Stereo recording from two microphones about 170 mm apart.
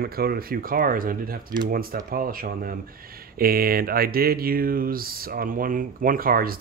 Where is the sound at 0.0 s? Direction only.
60° right (ahead or behind).